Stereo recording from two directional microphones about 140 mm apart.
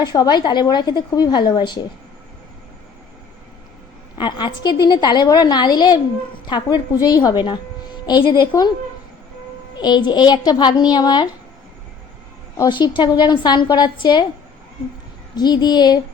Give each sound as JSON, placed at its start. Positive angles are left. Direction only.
{"t": 0.0, "sound": "a woman's voice", "side_deg": 30}
{"t": 4.2, "sound": "a woman's voice", "side_deg": 30}
{"t": 9.7, "sound": "a woman's voice", "side_deg": 30}
{"t": 12.5, "sound": "a woman's voice", "side_deg": 30}
{"t": 15.4, "sound": "a woman's voice", "side_deg": 30}